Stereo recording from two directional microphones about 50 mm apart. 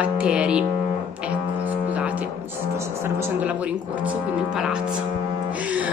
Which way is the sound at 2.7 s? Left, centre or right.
Right.